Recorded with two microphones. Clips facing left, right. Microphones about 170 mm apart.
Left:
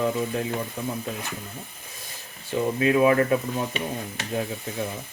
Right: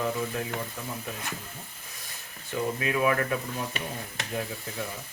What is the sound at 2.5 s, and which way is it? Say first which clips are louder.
Speech: left 7 dB; 30° left (ahead or behind).